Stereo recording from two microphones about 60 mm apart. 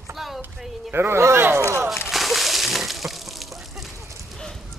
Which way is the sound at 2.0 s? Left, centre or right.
Centre.